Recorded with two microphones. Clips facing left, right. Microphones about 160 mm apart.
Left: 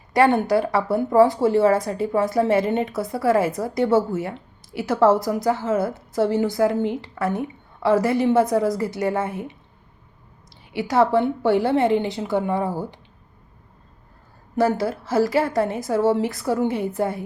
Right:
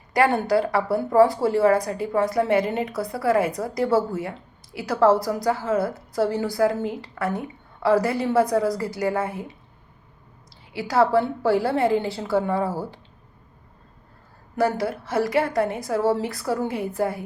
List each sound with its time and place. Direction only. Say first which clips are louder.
0.1 s a woman's voice: left 2 dB; 20° left (ahead or behind)
10.7 s a woman's voice: left 1 dB; 25° left (ahead or behind)
14.5 s a woman's voice: left 2 dB; 25° left (ahead or behind)